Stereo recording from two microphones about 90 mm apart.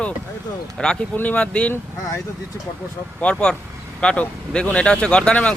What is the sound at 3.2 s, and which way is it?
Speech, 10° left (ahead or behind).